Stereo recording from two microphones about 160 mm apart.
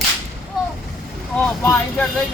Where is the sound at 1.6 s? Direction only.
15° left (ahead or behind).